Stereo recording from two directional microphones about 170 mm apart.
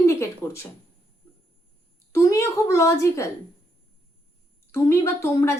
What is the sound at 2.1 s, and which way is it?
A woman's voice, 20° left (ahead or behind).